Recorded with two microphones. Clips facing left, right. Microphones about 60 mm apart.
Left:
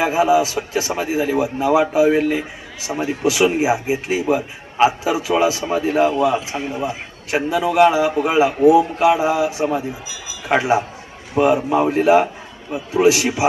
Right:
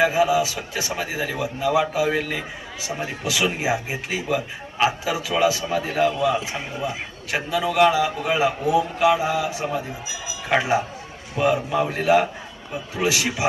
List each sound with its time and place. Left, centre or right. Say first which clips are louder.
0.0 s a man's voice: left 3 dB; left
6.2 s a man's voice: left 4 dB; centre